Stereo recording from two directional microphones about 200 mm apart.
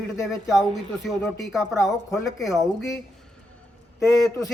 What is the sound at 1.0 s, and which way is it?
Speech, centre (ahead or behind).